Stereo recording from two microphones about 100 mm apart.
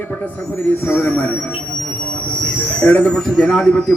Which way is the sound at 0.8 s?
20° left (ahead or behind).